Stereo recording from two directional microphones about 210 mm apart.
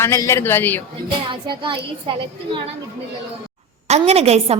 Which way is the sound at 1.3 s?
20° right (ahead or behind).